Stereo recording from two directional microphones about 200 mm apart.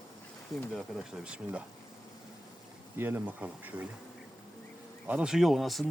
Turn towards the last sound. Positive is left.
turn(degrees=0)  # may be behind; listen again after turning